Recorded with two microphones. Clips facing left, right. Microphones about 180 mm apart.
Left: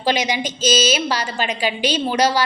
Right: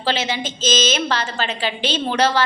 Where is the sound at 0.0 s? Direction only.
15° left (ahead or behind).